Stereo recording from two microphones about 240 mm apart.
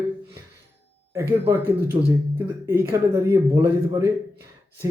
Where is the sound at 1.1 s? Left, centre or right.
Centre.